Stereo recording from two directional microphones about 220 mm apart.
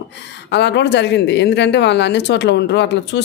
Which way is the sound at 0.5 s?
50° left (ahead or behind).